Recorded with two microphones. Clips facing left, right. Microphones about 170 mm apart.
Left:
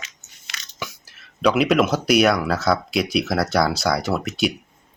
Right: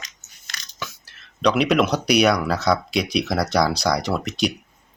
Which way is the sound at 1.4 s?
5° left (ahead or behind).